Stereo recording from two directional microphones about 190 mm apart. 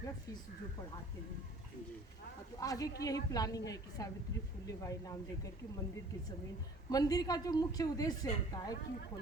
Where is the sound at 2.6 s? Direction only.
20° left (ahead or behind).